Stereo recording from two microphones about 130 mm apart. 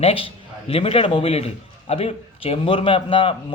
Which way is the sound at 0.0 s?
45° left (ahead or behind).